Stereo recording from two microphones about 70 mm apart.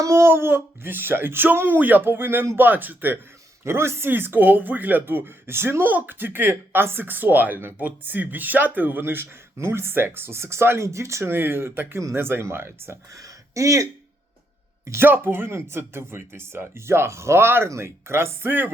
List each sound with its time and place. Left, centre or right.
0.0 s speech: right
3.6 s speech: right
14.8 s speech: right